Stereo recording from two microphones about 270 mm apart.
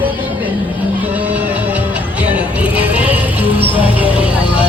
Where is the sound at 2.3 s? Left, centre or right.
Centre.